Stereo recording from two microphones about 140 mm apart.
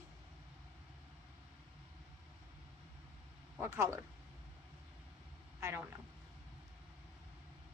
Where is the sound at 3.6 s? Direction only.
20° right (ahead or behind).